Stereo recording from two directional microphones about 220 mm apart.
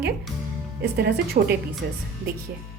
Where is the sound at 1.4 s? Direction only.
40° right (ahead or behind).